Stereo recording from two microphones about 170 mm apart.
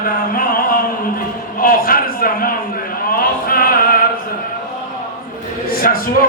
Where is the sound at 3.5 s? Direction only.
60° left (ahead or behind).